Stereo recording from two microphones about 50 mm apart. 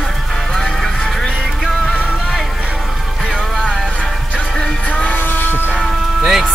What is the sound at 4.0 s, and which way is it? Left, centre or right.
Music, centre.